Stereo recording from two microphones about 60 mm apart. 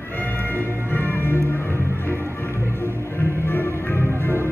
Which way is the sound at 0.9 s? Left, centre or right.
Left.